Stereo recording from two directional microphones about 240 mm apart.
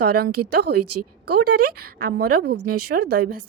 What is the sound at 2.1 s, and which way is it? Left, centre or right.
Speech, right.